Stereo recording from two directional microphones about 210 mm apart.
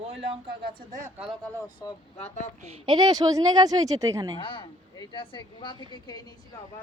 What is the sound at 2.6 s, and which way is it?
Speech, 20° right (ahead or behind).